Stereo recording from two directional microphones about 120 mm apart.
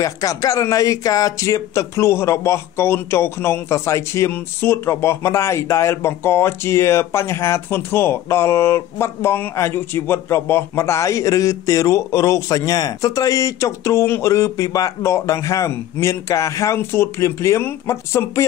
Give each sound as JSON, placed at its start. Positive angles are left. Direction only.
{"t": 0.0, "sound": "speech", "side_deg": 30}